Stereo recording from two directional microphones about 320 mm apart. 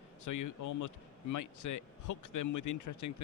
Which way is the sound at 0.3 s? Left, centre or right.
Left.